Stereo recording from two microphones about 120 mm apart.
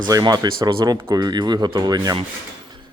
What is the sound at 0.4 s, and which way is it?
Speech, 45° right (ahead or behind).